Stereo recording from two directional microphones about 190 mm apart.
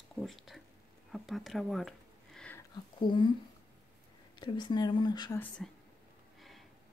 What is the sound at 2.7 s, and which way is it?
Speech, 25° left (ahead or behind).